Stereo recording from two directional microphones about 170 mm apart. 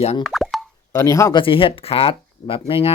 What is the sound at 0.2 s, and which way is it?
Plop, centre (ahead or behind).